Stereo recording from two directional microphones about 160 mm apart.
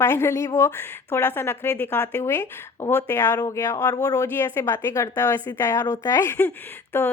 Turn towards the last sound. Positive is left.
turn(degrees=15)  # may be behind; listen again after turning